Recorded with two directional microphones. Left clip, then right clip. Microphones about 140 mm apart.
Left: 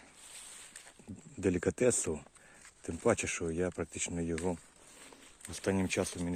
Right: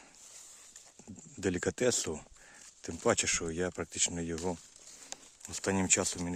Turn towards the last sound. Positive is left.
turn(degrees=-35)  # may be behind; listen again after turning